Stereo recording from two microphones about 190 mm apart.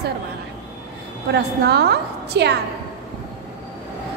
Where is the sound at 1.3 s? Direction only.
60° right (ahead or behind).